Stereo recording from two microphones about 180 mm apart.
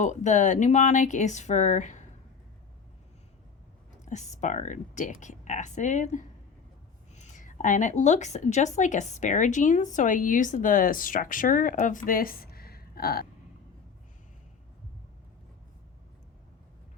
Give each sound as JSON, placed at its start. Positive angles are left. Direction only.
{"t": 0.0, "sound": "speech", "side_deg": 40}
{"t": 4.0, "sound": "a woman's voice", "side_deg": 40}